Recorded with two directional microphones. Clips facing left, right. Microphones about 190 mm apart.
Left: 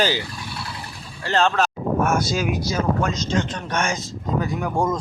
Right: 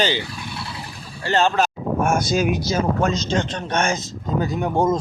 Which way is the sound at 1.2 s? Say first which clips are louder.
Right 1 dB; 5° right (ahead or behind).